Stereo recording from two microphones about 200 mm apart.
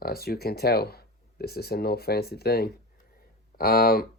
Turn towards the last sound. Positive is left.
turn(degrees=50)  # may be behind; listen again after turning